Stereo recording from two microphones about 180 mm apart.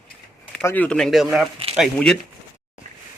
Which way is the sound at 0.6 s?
10° left (ahead or behind).